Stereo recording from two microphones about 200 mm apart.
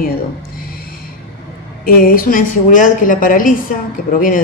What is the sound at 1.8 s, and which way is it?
A woman's voice, 45° left (ahead or behind).